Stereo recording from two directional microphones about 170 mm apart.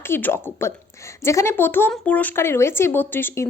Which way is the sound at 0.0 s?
10° left (ahead or behind).